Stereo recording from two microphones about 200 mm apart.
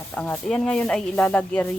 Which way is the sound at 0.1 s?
5° left (ahead or behind).